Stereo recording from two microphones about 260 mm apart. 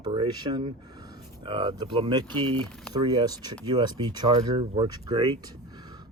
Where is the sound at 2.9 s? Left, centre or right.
Centre.